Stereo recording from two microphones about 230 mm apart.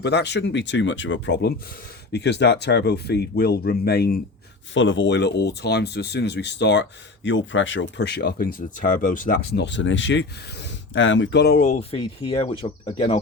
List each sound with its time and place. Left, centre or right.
0.0 s speech: left
4.7 s speech: left